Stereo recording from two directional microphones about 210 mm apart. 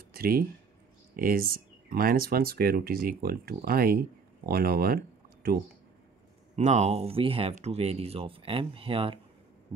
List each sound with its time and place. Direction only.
0.1 s speech: 45° right (ahead or behind)
6.5 s speech: 30° right (ahead or behind)